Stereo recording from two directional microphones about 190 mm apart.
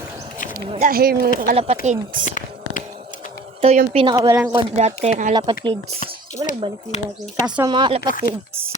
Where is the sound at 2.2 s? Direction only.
40° left (ahead or behind).